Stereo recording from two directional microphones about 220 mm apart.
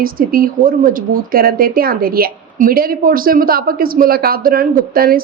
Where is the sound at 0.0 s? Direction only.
40° right (ahead or behind).